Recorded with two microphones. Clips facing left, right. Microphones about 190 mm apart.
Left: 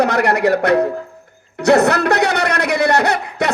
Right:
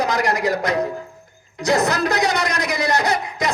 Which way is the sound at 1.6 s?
65° left (ahead or behind).